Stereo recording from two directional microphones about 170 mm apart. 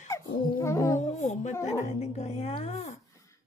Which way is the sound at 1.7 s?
40° left (ahead or behind).